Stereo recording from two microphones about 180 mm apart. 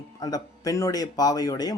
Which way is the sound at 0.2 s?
20° left (ahead or behind).